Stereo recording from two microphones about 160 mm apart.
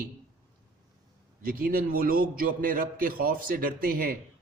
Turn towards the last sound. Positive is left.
turn(degrees=-65)  # may be behind; listen again after turning